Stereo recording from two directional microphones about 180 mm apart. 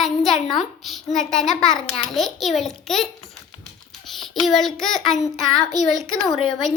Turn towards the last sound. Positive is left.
turn(degrees=0)  # may be behind; listen again after turning